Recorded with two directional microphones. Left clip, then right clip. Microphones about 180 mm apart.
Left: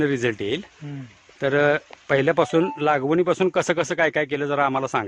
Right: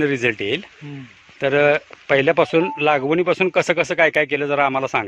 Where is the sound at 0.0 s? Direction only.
10° left (ahead or behind).